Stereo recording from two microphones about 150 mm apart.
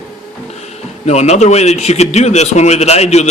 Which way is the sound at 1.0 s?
50° left (ahead or behind).